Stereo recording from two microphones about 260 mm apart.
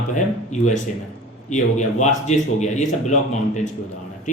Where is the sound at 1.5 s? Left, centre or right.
Left.